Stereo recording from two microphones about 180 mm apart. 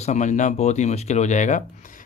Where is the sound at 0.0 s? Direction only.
40° left (ahead or behind).